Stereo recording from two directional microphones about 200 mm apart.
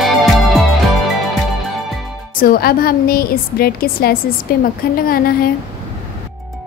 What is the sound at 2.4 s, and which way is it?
A woman's voice, 45° left (ahead or behind).